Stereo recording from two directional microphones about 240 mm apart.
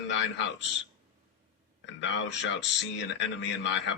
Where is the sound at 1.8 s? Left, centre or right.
Left.